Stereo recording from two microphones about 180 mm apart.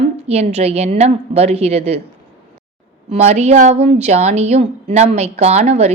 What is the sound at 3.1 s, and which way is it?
Speech, 35° right (ahead or behind).